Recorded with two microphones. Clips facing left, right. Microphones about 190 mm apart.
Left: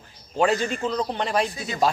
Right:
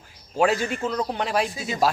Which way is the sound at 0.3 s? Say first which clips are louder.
Even; 5° right (ahead or behind).